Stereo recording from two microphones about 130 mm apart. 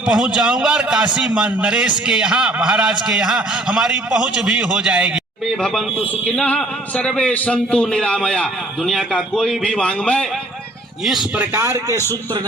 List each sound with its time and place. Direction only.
0.0 s a man's voice: 5° right (ahead or behind)
11.3 s a man's voice: 15° right (ahead or behind)